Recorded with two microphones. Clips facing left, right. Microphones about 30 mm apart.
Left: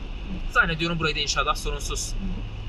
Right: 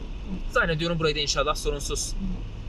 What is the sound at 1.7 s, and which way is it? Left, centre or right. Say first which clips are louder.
Speech: right 4 dB; left.